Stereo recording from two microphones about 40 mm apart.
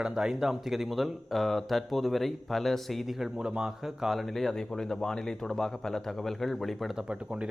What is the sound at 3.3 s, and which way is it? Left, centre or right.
Speech, right.